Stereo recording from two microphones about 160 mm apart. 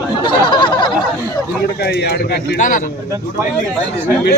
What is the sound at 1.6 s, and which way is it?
Speech, 85° left.